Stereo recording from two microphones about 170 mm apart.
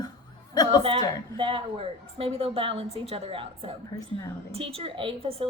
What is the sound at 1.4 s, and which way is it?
A woman's voice, 30° right (ahead or behind).